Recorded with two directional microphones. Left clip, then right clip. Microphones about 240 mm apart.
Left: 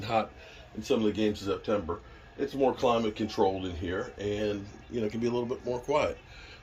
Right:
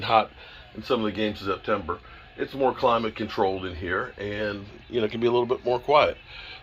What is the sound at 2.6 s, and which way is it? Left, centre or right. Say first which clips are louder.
Speech: right 4 dB; centre.